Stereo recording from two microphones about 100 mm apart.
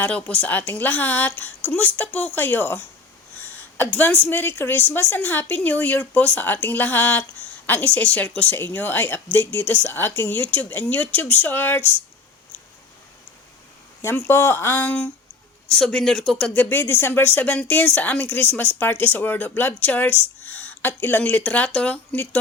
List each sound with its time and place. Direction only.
0.0 s a woman's voice: 15° left (ahead or behind)
14.3 s speech: 25° left (ahead or behind)
15.7 s a woman's voice: 5° left (ahead or behind)